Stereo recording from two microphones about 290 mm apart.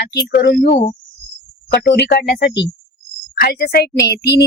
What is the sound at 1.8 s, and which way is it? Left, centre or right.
Speech, left.